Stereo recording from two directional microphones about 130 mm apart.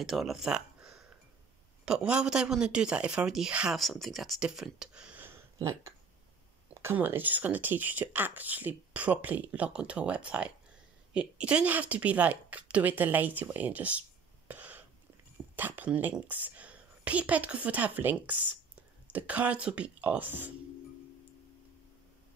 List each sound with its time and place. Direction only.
0.0 s speech: centre (ahead or behind)
5.6 s speech: 25° right (ahead or behind)
14.5 s throat clearing: 10° right (ahead or behind)
15.5 s speech: 15° right (ahead or behind)